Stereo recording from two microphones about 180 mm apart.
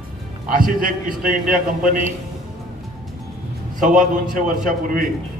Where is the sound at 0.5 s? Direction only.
50° right (ahead or behind).